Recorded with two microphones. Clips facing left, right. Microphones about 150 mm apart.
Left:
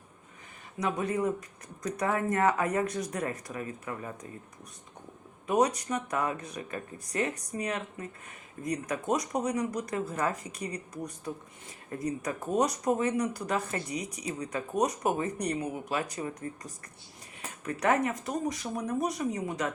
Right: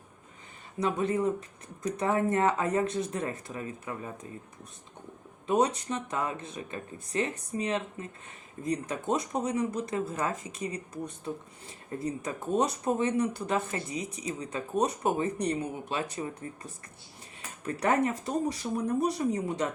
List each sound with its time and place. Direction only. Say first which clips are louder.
0.8 s speech: right 2 dB; 30° right (ahead or behind)
5.5 s speech: even; 30° right (ahead or behind)